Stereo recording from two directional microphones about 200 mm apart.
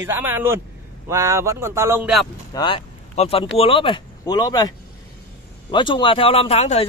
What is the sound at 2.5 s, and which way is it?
Speech, 25° left (ahead or behind).